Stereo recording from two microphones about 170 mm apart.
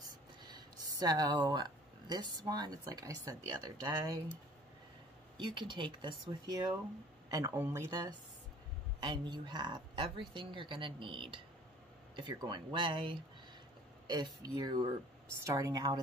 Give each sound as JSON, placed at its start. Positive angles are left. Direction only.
{"t": 1.0, "sound": "speech", "side_deg": -20}
{"t": 5.4, "sound": "speech", "side_deg": -30}
{"t": 9.0, "sound": "speech", "side_deg": -25}